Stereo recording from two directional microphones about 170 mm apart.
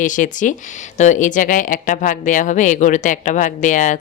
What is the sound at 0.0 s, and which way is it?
Speech, 50° left (ahead or behind).